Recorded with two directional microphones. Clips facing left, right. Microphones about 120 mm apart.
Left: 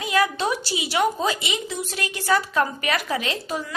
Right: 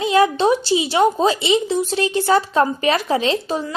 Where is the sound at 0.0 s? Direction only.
25° right (ahead or behind).